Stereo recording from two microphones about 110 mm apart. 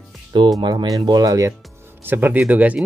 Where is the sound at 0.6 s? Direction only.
40° right (ahead or behind).